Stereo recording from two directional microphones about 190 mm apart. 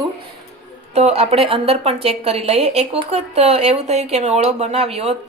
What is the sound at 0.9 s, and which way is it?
A woman's voice, 35° right (ahead or behind).